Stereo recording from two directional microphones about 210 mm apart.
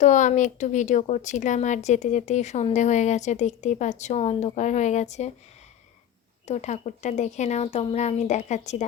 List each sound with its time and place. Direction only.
0.0 s speech: 35° left (ahead or behind)
6.5 s speech: 35° left (ahead or behind)